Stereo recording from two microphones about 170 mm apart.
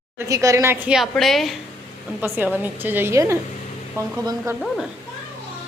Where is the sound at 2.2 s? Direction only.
10° right (ahead or behind).